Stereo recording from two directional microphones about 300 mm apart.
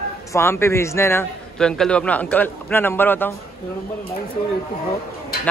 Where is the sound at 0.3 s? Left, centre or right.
Centre.